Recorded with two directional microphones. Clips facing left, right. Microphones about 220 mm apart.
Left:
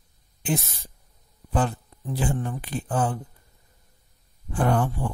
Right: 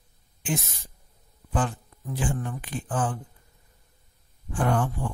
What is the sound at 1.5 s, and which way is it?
Speech, 35° left (ahead or behind).